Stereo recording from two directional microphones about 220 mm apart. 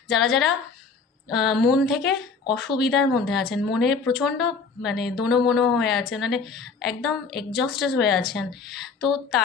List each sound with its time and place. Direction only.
0.1 s speech: centre (ahead or behind)